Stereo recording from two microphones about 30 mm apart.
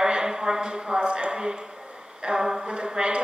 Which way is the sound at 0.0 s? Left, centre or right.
Right.